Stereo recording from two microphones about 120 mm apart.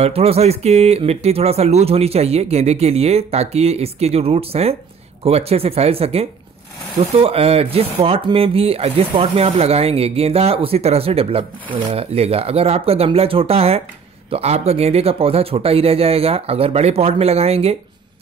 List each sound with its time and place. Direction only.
0.0 s speech: 55° right (ahead or behind)